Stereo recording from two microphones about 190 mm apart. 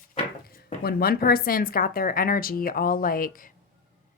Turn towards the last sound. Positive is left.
turn(degrees=50)  # may be behind; listen again after turning